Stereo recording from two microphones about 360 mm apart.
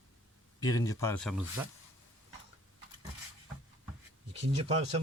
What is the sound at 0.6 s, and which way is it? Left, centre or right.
Speech, centre.